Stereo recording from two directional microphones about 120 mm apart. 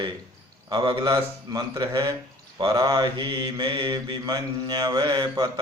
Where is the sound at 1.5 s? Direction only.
30° right (ahead or behind).